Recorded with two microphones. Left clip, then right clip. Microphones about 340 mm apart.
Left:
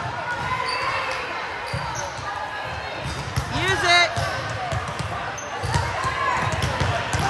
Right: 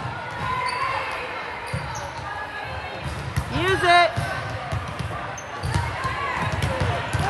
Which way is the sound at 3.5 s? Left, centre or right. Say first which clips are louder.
Right 1 dB; centre.